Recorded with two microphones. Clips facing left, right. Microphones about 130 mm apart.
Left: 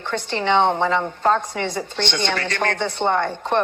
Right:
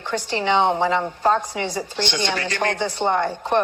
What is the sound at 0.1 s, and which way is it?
A woman's voice, 60° left (ahead or behind).